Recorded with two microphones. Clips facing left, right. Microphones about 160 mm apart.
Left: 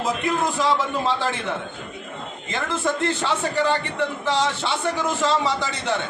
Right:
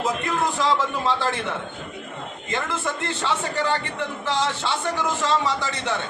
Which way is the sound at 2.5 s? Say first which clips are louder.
Left 3 dB; 15° left (ahead or behind).